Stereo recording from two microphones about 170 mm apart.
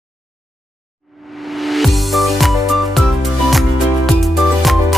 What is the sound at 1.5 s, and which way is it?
Music, centre (ahead or behind).